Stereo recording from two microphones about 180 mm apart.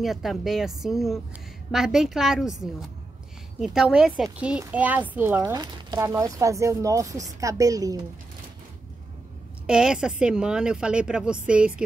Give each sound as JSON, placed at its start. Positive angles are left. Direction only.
{"t": 0.0, "sound": "speech", "side_deg": 0}
{"t": 3.5, "sound": "speech", "side_deg": -5}
{"t": 9.7, "sound": "speech", "side_deg": -5}